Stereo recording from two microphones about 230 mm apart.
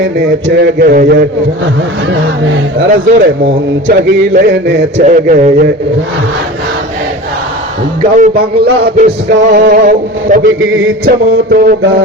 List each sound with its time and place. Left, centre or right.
0.4 s a man's voice: right
2.0 s speech: right
2.9 s mantra: right
4.4 s a man's voice: right
5.0 s mantra: right
8.1 s mantra: right
10.6 s speech: right
11.0 s mantra: right